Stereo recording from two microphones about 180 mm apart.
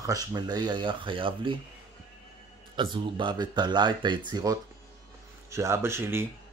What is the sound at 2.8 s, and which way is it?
Speech, 25° right (ahead or behind).